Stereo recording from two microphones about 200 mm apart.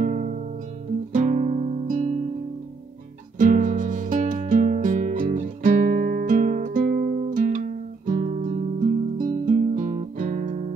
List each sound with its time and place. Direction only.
0.0 s music: 40° right (ahead or behind)
1.1 s guitar: 40° right (ahead or behind)
3.3 s music: 40° right (ahead or behind)